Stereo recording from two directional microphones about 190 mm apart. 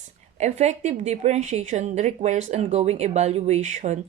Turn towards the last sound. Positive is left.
turn(degrees=-40)  # may be behind; listen again after turning